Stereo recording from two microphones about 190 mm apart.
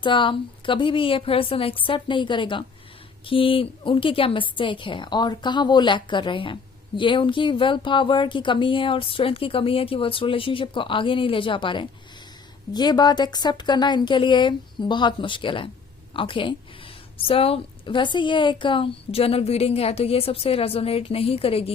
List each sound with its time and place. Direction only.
0.0 s a woman's voice: 25° left (ahead or behind)